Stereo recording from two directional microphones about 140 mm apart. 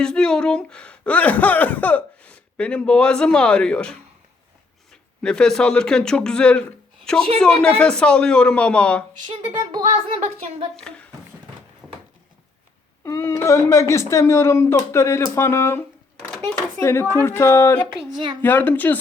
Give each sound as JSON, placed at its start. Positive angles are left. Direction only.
{"t": 0.0, "sound": "speech", "side_deg": 5}
{"t": 9.2, "sound": "speech", "side_deg": -30}
{"t": 10.8, "sound": "speech", "side_deg": 5}
{"t": 11.8, "sound": "a sound", "side_deg": -5}
{"t": 13.1, "sound": "speech", "side_deg": 20}